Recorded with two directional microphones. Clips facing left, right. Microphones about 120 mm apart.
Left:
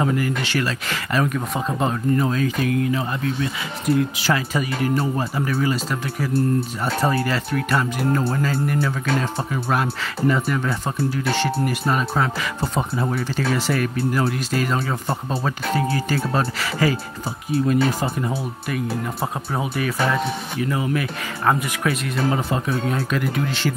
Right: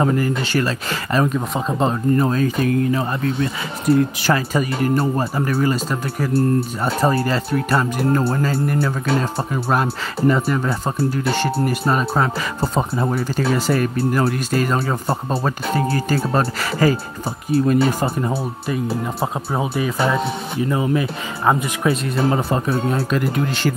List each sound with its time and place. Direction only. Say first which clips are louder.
0.0 s speech: right 3 dB; 40° right (ahead or behind)
2.2 s speech: right 3 dB; 40° right (ahead or behind)
7.0 s speech: right 3 dB; 35° right (ahead or behind)
19.5 s speech: right 2 dB; 20° right (ahead or behind)
22.3 s speech: right 3 dB; 40° right (ahead or behind)